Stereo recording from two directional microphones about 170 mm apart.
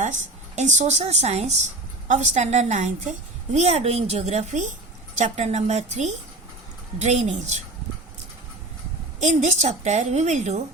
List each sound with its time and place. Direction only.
0.5 s a woman's voice: 45° right (ahead or behind)
9.2 s a woman's voice: 45° right (ahead or behind)